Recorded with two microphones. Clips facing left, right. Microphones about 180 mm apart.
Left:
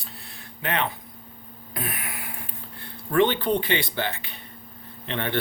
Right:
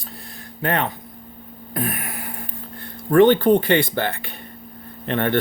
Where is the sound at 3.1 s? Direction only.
45° right (ahead or behind).